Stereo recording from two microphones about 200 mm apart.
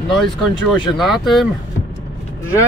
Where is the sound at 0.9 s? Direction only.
Centre (ahead or behind).